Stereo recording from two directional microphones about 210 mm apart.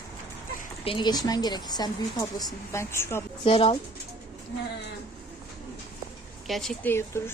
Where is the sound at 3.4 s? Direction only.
25° left (ahead or behind).